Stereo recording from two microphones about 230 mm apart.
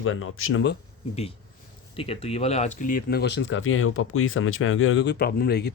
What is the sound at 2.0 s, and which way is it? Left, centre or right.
Speech, left.